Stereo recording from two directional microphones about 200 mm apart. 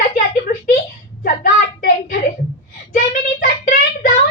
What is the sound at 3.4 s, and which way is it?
Child singing, 40° left (ahead or behind).